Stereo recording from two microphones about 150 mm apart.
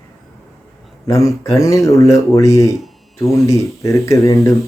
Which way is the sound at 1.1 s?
20° left (ahead or behind).